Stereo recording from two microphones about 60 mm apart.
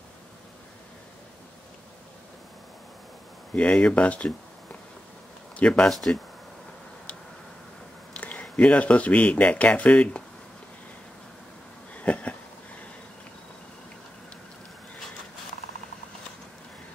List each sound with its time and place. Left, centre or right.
3.5 s speech: centre
5.6 s speech: centre
8.2 s speech: left
12.0 s a sound: left